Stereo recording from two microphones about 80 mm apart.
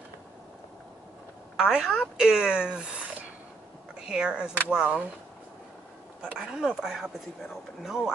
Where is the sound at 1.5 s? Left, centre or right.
Centre.